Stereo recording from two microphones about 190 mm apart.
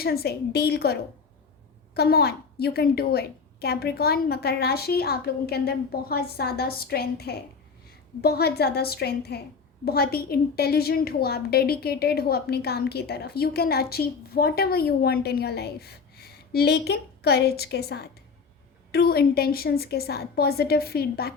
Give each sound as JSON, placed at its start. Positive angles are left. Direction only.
{"t": 0.0, "sound": "a woman's voice", "side_deg": 55}
{"t": 2.0, "sound": "a woman's voice", "side_deg": 55}